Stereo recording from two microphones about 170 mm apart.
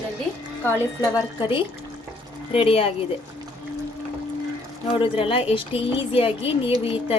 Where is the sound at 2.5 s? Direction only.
35° left (ahead or behind).